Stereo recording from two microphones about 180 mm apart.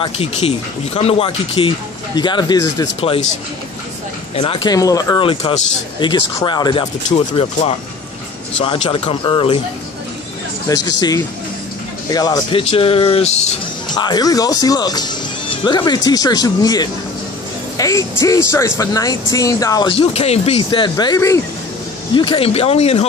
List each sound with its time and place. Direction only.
0.0 s speech: 30° left (ahead or behind)
3.0 s speech: 30° left (ahead or behind)
4.4 s speech: 30° left (ahead or behind)
4.7 s speech: 20° left (ahead or behind)
10.7 s speech: 20° left (ahead or behind)
13.8 s speech: 25° left (ahead or behind)